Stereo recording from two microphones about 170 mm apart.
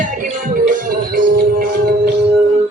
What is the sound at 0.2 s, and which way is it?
Music, 50° right (ahead or behind).